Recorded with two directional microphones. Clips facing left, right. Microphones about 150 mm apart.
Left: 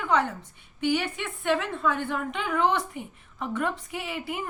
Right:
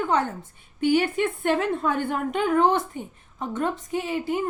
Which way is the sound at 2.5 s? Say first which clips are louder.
Right 4 dB; 30° right (ahead or behind).